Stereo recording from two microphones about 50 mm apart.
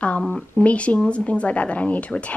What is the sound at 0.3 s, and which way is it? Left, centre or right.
Speech, left.